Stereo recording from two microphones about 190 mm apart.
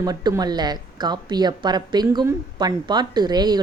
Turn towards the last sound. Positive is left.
turn(degrees=-20)  # may be behind; listen again after turning